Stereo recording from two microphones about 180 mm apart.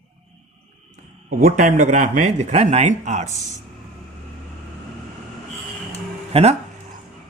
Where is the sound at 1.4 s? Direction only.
45° right (ahead or behind).